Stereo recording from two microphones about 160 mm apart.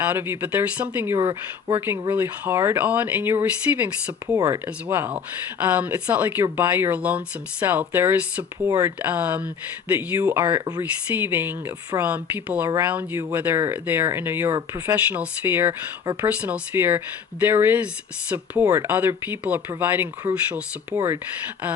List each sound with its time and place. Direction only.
0.0 s speech: 15° right (ahead or behind)
1.2 s speech: 25° right (ahead or behind)
1.8 s speech: 15° right (ahead or behind)